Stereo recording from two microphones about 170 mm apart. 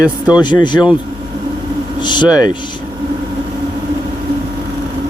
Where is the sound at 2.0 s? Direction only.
25° left (ahead or behind).